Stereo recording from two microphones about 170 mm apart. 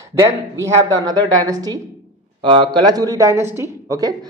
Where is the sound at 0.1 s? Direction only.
15° right (ahead or behind).